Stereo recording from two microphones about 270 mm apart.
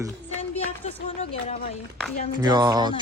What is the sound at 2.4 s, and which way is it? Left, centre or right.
Speech, centre.